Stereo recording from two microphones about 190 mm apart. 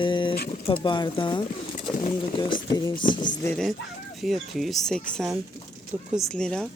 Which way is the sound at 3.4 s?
Centre (ahead or behind).